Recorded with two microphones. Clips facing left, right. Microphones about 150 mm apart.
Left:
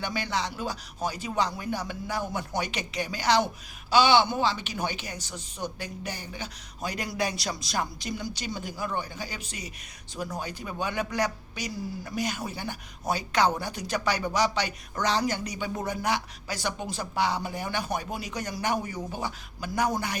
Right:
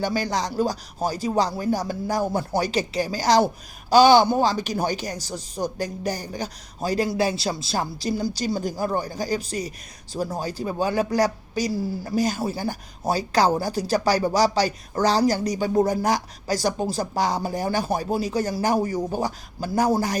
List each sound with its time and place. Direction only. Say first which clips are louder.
0.0 s speech: right 6 dB; 40° right (ahead or behind)